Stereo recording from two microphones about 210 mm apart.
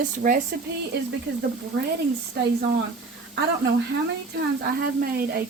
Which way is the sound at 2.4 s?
50° right (ahead or behind).